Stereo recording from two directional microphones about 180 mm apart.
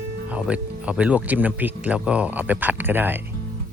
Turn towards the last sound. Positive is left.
turn(degrees=-10)  # may be behind; listen again after turning